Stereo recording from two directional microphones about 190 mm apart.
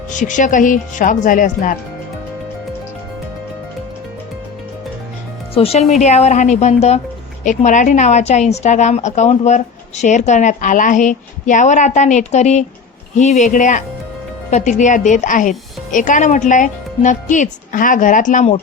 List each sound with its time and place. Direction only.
0.1 s speech: 40° left (ahead or behind)
5.5 s a woman's voice: 35° left (ahead or behind)